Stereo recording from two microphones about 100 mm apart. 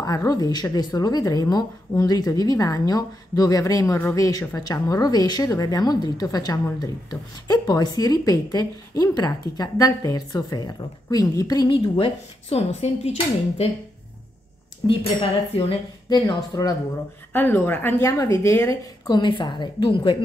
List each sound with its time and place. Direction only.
0.0 s speech: 40° left (ahead or behind)
11.7 s speech: 75° left (ahead or behind)
14.8 s a woman's voice: 50° left (ahead or behind)
15.5 s speech: 90° left
16.1 s a woman's voice: 45° left (ahead or behind)
17.3 s speech: 20° left (ahead or behind)
18.0 s speech: 35° left (ahead or behind)
19.0 s a woman's voice: 50° left (ahead or behind)